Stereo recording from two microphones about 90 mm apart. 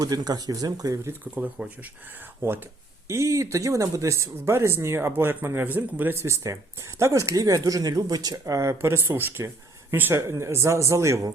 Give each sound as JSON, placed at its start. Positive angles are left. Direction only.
{"t": 0.0, "sound": "speech", "side_deg": -45}
{"t": 1.0, "sound": "speech", "side_deg": -20}
{"t": 6.1, "sound": "speech", "side_deg": -35}